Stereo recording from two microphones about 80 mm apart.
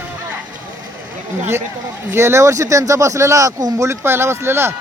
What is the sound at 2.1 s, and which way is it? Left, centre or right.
Speech, right.